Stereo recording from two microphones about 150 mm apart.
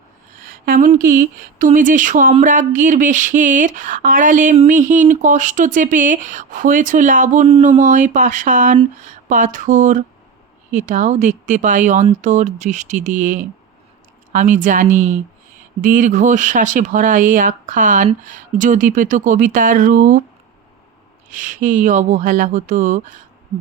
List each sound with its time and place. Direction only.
0.3 s a sound: 70° right (ahead or behind)
0.9 s speech: 65° right (ahead or behind)
21.2 s speech: 55° right (ahead or behind)